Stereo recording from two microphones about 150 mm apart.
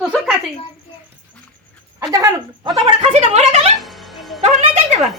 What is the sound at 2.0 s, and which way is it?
Speech, 20° right (ahead or behind).